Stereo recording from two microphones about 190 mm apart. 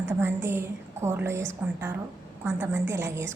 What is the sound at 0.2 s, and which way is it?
A woman's voice, 10° right (ahead or behind).